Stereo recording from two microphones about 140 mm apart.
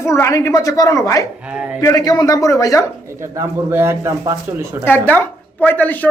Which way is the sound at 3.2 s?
20° right (ahead or behind).